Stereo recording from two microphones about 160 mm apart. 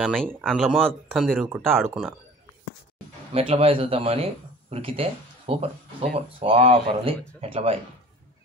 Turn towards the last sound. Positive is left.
turn(degrees=-35)  # may be behind; listen again after turning